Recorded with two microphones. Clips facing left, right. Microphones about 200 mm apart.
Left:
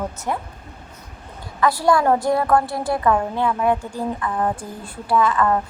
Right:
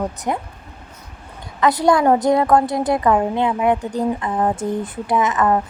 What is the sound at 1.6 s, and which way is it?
A woman's voice, 20° right (ahead or behind).